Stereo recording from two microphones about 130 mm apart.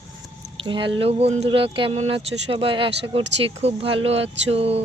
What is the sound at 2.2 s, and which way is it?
Speech, 45° right (ahead or behind).